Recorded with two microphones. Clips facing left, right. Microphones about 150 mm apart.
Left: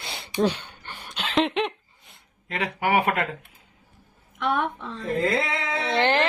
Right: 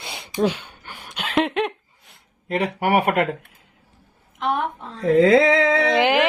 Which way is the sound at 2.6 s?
55° right (ahead or behind).